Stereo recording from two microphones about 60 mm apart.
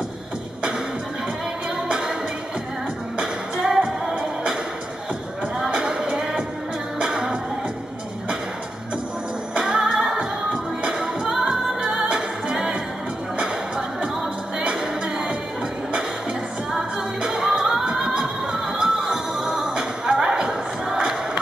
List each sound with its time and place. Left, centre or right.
1.9 s music: centre
3.2 s music: centre
5.7 s music: centre
9.5 s music: centre
14.8 s music: centre
17.2 s music: centre